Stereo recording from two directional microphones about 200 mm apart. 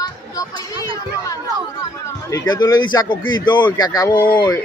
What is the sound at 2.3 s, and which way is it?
Speech, 20° left (ahead or behind).